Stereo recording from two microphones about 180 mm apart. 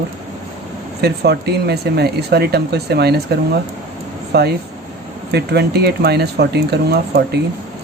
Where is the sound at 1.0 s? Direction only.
65° right (ahead or behind).